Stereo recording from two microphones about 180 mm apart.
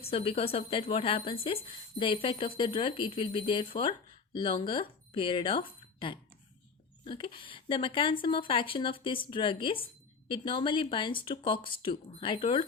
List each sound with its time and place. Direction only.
0.0 s speech: 30° left (ahead or behind)